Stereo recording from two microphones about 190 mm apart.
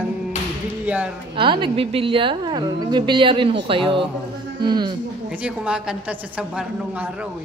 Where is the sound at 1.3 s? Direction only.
25° right (ahead or behind).